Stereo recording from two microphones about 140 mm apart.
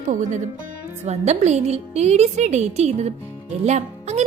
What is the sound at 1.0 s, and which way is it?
Speech, 50° right (ahead or behind).